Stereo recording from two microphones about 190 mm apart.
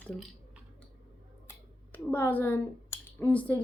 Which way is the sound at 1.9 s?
10° left (ahead or behind).